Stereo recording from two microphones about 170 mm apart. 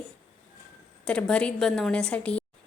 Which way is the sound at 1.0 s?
5° left (ahead or behind).